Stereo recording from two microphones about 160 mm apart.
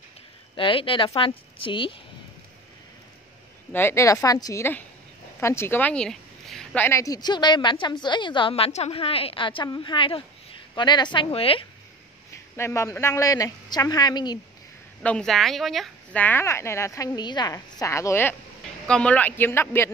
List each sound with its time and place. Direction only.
0.6 s a woman's voice: 35° left (ahead or behind)
3.7 s a woman's voice: 15° left (ahead or behind); by 11.6 s 35° left (ahead or behind)
12.5 s a woman's voice: 15° left (ahead or behind)
15.0 s speech: 5° left (ahead or behind)